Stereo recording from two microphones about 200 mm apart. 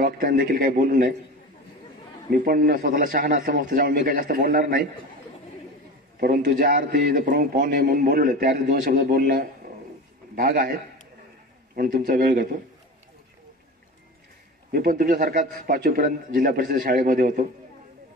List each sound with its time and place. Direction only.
0.0 s a man's voice: 45° right (ahead or behind)
2.3 s a man's voice: 45° right (ahead or behind)
6.1 s a man's voice: 45° right (ahead or behind)
11.7 s a man's voice: 45° right (ahead or behind)
14.7 s a man's voice: 45° right (ahead or behind)